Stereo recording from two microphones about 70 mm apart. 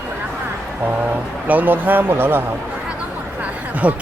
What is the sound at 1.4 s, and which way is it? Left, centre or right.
Speech, right.